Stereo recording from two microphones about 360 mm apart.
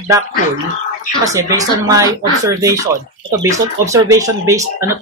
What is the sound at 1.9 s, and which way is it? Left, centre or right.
Speech, centre.